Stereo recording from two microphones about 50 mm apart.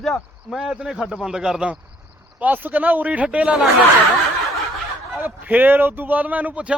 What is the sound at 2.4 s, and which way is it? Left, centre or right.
Speech, right.